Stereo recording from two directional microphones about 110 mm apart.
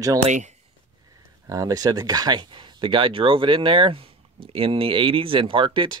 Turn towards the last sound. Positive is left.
turn(degrees=-50)  # may be behind; listen again after turning